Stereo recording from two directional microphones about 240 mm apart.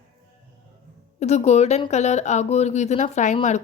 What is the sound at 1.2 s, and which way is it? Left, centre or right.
Speech, left.